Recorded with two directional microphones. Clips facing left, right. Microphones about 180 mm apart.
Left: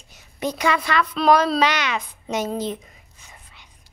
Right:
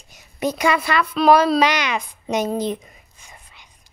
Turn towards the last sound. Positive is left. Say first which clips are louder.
# right 2 dB
turn(degrees=-15)  # may be behind; listen again after turning